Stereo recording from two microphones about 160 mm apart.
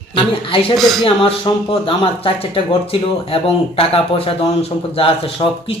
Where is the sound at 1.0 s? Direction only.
30° left (ahead or behind).